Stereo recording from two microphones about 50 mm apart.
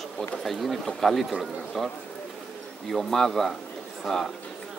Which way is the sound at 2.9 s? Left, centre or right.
Centre.